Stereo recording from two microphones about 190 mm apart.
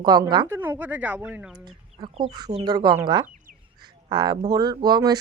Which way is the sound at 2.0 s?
25° right (ahead or behind).